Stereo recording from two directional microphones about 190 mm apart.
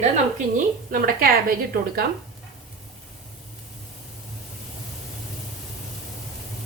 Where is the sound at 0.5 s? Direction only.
50° right (ahead or behind).